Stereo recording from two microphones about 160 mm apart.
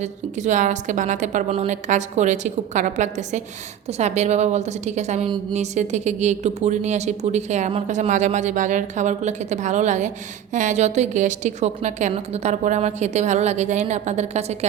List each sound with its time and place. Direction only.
0.0 s speech: 50° right (ahead or behind)